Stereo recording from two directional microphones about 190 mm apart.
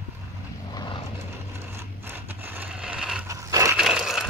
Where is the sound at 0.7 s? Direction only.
25° left (ahead or behind).